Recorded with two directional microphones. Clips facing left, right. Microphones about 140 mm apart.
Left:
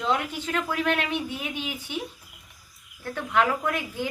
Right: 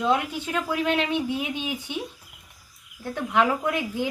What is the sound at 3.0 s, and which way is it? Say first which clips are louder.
Speech: right 1 dB; 15° right (ahead or behind).